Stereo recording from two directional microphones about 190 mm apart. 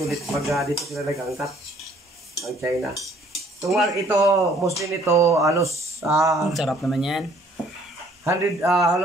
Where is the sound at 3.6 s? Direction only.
Centre (ahead or behind).